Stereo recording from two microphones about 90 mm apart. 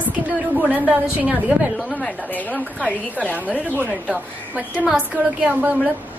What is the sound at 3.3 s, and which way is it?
A woman's voice, 15° right (ahead or behind).